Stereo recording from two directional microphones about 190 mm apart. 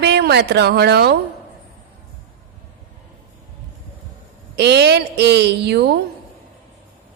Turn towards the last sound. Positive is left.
turn(degrees=-60)  # may be behind; listen again after turning